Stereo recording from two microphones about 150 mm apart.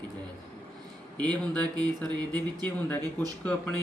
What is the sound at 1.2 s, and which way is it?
Speech, 5° left (ahead or behind).